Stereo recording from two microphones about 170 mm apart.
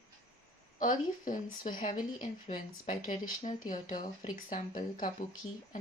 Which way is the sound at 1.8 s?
50° left (ahead or behind).